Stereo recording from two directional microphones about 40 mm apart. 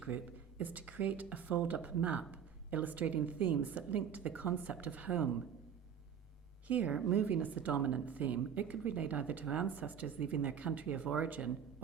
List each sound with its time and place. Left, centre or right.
0.6 s a woman's voice: right
6.7 s a woman's voice: right